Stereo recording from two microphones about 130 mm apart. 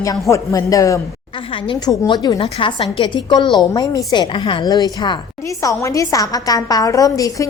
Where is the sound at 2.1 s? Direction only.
35° left (ahead or behind).